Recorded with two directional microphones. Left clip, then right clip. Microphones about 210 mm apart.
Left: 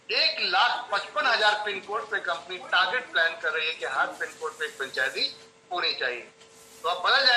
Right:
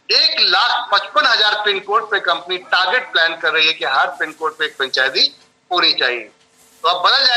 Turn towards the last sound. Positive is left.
turn(degrees=-50)  # may be behind; listen again after turning